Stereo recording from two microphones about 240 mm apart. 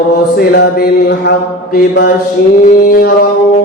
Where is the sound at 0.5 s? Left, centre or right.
Left.